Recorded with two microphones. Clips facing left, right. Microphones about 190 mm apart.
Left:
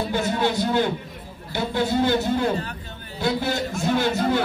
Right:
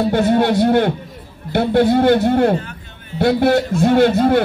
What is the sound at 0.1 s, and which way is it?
A man's voice, 65° right (ahead or behind).